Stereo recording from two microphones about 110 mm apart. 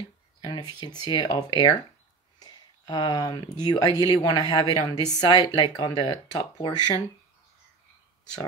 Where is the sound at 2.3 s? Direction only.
40° left (ahead or behind).